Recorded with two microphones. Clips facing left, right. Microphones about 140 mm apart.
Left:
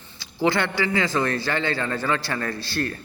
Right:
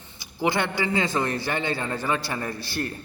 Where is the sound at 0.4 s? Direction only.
20° right (ahead or behind).